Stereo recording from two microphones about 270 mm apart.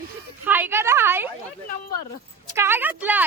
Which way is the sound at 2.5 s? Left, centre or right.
Centre.